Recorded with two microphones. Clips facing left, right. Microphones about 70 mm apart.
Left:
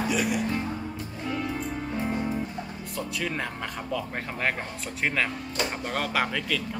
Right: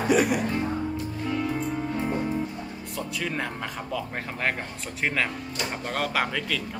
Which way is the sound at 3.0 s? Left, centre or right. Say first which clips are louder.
Even; centre.